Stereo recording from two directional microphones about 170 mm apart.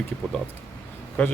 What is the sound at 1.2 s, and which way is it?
Speech, 10° left (ahead or behind).